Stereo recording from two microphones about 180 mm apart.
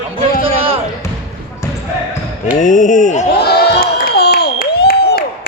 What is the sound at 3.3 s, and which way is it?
Crowd, 65° left (ahead or behind).